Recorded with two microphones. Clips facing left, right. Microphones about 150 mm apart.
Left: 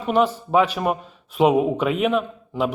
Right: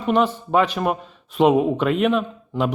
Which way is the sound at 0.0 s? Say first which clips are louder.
Even; 5° left (ahead or behind).